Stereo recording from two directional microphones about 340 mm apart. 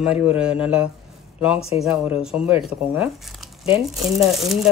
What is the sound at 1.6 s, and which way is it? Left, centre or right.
Speech, centre.